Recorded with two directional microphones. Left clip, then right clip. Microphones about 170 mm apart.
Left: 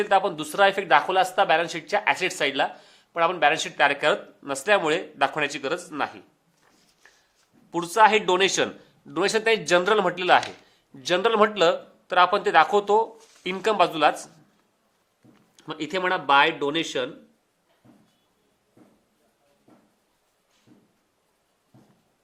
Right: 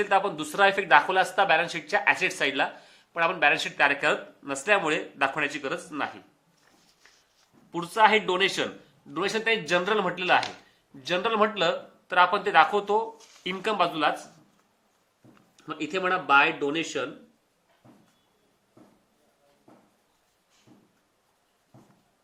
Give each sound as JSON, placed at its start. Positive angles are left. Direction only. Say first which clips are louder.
{"t": 0.0, "sound": "a man's voice", "louder": "left 3 dB", "side_deg": 35}
{"t": 7.7, "sound": "speech", "louder": "left 3 dB", "side_deg": 60}
{"t": 15.5, "sound": "speech", "louder": "left 2 dB", "side_deg": 60}